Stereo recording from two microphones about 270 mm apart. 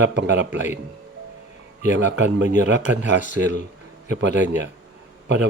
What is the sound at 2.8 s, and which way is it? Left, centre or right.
Speech, left.